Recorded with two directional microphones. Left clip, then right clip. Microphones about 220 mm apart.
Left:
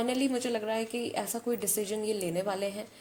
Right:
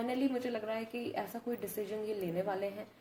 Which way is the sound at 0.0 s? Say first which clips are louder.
Left 5 dB; 45° left (ahead or behind).